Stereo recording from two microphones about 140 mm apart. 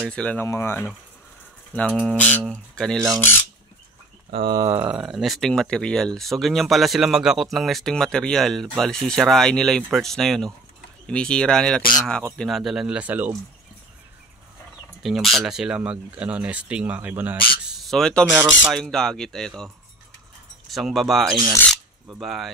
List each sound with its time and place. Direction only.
0.0 s speech: 5° left (ahead or behind)
4.3 s speech: 40° right (ahead or behind)
4.6 s speech: 20° right (ahead or behind)
4.8 s speech: 5° right (ahead or behind)
15.0 s speech: centre (ahead or behind)
17.7 s a sound: centre (ahead or behind)
18.7 s speech: 5° left (ahead or behind)